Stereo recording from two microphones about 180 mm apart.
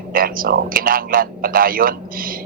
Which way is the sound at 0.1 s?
50° right (ahead or behind).